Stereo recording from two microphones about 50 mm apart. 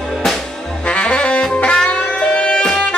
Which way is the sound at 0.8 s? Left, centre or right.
Left.